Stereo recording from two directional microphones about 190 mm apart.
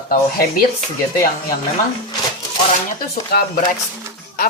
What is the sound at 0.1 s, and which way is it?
Speech, 50° left (ahead or behind).